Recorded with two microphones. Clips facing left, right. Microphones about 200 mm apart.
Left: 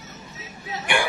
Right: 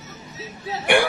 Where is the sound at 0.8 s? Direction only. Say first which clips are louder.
Right 6 dB; 55° right (ahead or behind).